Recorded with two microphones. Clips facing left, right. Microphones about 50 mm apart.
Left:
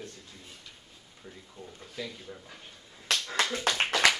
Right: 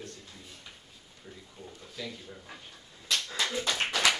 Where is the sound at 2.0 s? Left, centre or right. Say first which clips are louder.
Left 2 dB; centre.